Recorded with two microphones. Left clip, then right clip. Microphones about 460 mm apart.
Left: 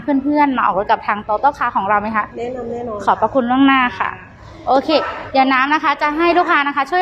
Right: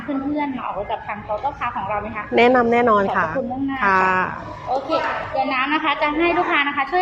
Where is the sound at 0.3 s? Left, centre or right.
Left.